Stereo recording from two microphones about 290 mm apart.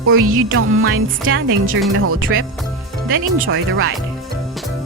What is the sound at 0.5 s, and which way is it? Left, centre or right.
Speech, right.